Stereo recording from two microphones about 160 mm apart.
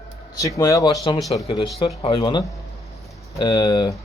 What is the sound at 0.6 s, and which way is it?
Speech, 20° left (ahead or behind).